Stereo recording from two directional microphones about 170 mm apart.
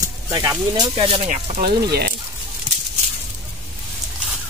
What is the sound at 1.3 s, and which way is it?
Speech, 45° right (ahead or behind).